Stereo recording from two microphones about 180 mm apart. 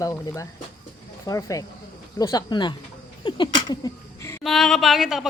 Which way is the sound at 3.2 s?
25° left (ahead or behind).